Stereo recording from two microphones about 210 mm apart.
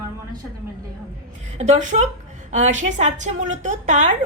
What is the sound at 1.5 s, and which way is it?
A woman's voice, 35° right (ahead or behind).